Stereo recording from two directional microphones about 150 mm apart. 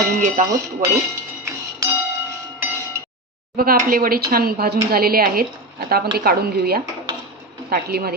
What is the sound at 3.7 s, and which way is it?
Speech, 70° right (ahead or behind).